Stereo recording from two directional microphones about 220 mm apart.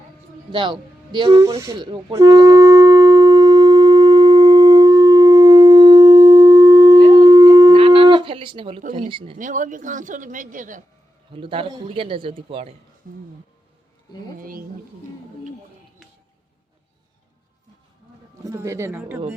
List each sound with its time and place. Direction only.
0.5 s a sound: 20° right (ahead or behind)
9.4 s a woman's voice: 35° right (ahead or behind)
11.3 s a man's voice: 25° right (ahead or behind)
13.0 s a woman's voice: 40° right (ahead or behind)
14.3 s a woman's voice: 40° right (ahead or behind)
18.4 s a man's voice: 15° right (ahead or behind)